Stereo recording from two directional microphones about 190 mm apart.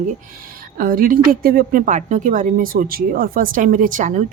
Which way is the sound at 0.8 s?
45° right (ahead or behind).